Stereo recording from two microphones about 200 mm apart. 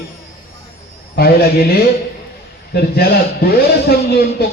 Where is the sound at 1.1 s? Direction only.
50° left (ahead or behind).